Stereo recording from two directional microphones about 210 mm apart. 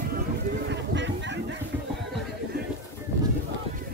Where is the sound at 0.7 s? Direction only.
60° right (ahead or behind).